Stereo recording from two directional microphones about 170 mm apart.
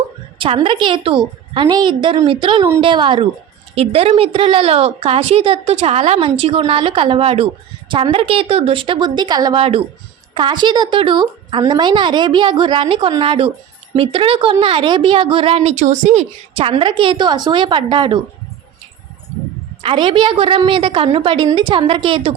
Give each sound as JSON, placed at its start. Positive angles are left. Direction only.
{"t": 0.3, "sound": "a woman's voice", "side_deg": -30}
{"t": 19.8, "sound": "a woman's voice", "side_deg": -30}